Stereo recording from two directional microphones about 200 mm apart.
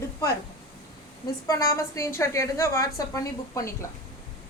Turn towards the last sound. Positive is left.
turn(degrees=15)  # may be behind; listen again after turning